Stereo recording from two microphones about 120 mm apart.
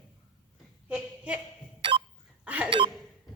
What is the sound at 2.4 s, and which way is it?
Chink, 10° right (ahead or behind).